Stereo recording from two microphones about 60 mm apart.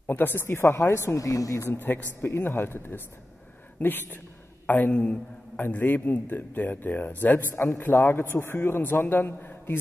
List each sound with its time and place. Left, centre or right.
0.0 s a man's voice: left
1.2 s speech: left
1.7 s a man's voice: left